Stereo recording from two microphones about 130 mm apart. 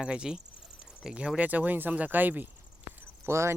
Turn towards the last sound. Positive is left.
turn(degrees=-20)  # may be behind; listen again after turning